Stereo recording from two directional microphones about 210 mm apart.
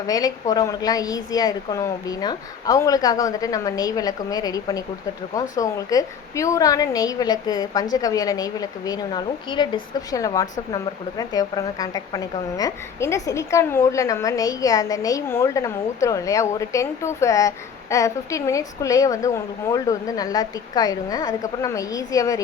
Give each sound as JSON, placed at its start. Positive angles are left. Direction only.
{"t": 0.1, "sound": "a woman's voice", "side_deg": 15}